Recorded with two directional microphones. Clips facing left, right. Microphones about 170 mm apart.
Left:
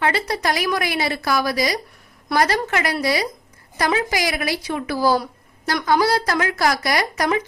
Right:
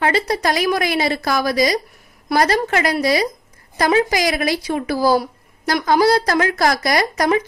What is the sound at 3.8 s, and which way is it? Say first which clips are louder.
A woman's voice: right 5 dB; 30° right (ahead or behind).